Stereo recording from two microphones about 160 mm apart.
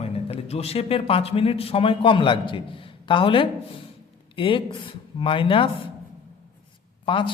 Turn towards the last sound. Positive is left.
turn(degrees=30)  # may be behind; listen again after turning